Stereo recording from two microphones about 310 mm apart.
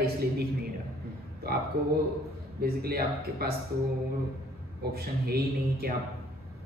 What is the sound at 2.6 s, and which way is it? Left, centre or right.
Speech, right.